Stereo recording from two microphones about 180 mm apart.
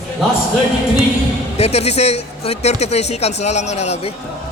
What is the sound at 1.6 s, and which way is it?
A man's voice, 35° left (ahead or behind).